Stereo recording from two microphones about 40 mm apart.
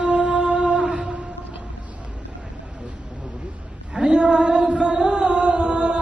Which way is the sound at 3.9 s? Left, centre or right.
Right.